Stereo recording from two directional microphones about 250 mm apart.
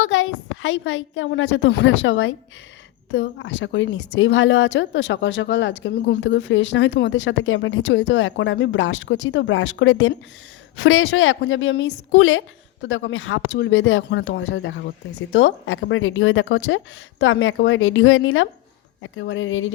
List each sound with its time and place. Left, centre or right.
0.1 s a woman's voice: left